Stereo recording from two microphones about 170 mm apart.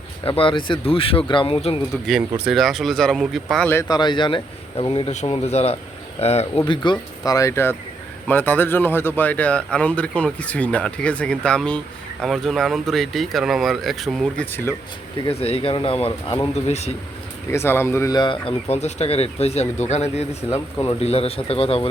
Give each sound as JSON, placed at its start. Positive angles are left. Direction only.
{"t": 0.3, "sound": "speech", "side_deg": 30}
{"t": 2.0, "sound": "speech", "side_deg": -5}
{"t": 3.7, "sound": "speech", "side_deg": 20}
{"t": 6.7, "sound": "speech", "side_deg": 25}
{"t": 14.5, "sound": "speech", "side_deg": 15}
{"t": 15.2, "sound": "speech", "side_deg": 35}
{"t": 17.5, "sound": "speech", "side_deg": 15}